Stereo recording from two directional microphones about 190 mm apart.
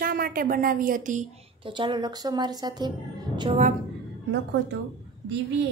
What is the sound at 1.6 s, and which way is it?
A woman's voice, 25° right (ahead or behind).